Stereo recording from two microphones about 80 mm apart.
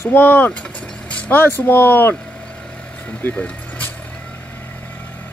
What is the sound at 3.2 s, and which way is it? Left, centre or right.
Vehicle, centre.